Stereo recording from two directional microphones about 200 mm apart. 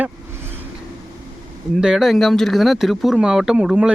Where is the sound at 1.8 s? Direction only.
Centre (ahead or behind).